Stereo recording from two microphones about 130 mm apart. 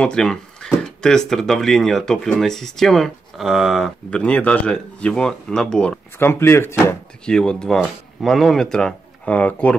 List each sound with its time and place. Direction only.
0.0 s speech: 5° left (ahead or behind)
6.1 s speech: 20° left (ahead or behind)
7.2 s speech: 5° left (ahead or behind)